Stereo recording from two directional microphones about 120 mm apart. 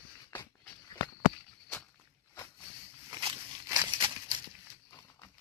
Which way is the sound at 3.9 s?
45° right (ahead or behind).